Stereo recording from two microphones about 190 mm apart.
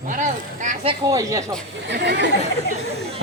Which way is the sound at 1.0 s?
20° right (ahead or behind).